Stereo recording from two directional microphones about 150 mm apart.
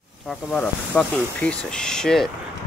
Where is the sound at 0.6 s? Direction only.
10° left (ahead or behind).